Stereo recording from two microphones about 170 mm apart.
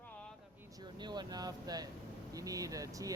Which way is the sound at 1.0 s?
25° right (ahead or behind).